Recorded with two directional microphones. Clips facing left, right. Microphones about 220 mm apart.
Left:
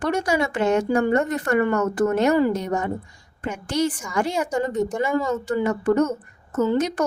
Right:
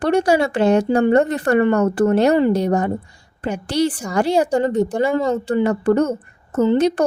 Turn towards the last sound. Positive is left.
turn(degrees=-30)  # may be behind; listen again after turning